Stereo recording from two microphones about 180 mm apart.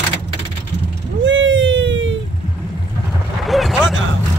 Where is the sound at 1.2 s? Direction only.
90° right.